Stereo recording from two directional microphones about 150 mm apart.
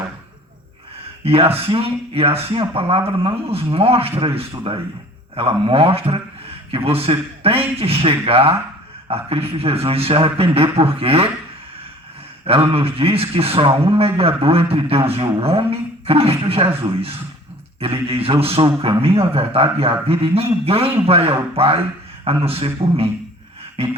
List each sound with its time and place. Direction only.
1.2 s a man's voice: 40° right (ahead or behind)
12.7 s a man's voice: 40° right (ahead or behind)